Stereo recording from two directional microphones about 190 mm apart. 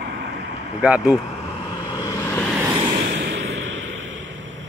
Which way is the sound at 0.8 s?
5° right (ahead or behind).